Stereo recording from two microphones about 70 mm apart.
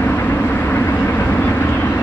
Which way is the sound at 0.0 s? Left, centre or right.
Left.